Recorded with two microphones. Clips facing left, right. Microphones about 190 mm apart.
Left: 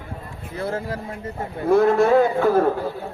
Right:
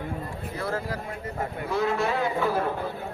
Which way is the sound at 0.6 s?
25° left (ahead or behind).